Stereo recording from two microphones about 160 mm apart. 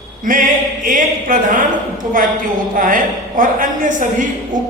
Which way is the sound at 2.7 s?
55° right (ahead or behind).